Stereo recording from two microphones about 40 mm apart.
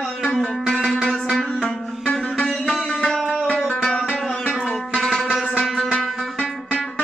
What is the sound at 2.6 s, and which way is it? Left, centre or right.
Music, centre.